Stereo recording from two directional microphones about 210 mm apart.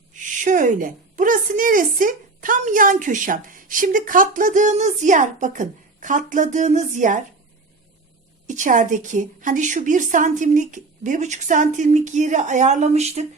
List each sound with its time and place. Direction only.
0.1 s a woman's voice: 35° right (ahead or behind)
8.4 s a woman's voice: 35° right (ahead or behind)